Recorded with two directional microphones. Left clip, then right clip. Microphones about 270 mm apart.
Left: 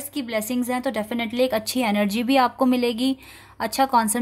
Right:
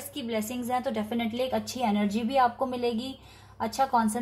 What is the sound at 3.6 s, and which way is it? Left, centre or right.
Speech, left.